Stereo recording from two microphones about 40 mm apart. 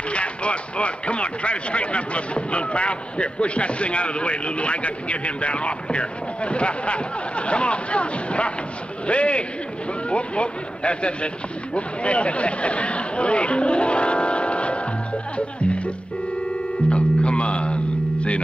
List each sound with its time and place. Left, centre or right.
0.1 s speech: left
16.9 s music: left